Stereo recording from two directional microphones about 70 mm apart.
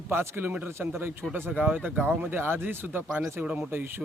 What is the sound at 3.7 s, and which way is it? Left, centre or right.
Speech, right.